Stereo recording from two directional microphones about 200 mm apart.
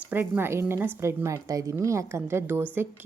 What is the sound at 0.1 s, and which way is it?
A woman's voice, 10° right (ahead or behind).